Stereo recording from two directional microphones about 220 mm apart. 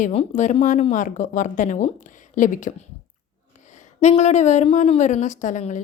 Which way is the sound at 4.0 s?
30° left (ahead or behind).